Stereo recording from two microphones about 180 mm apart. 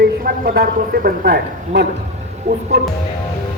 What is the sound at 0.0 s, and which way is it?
A man's voice, 60° right (ahead or behind).